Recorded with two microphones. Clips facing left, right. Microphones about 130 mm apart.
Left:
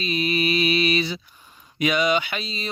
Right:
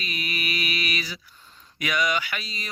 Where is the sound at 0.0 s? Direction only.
25° left (ahead or behind).